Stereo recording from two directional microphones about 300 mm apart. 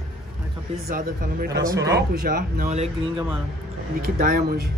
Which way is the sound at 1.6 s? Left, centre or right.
Centre.